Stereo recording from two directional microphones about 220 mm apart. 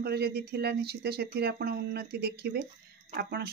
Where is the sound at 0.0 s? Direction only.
45° right (ahead or behind).